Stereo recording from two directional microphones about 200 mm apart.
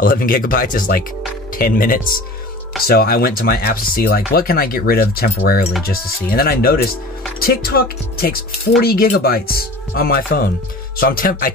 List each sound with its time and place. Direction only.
0.0 s speech: 45° left (ahead or behind)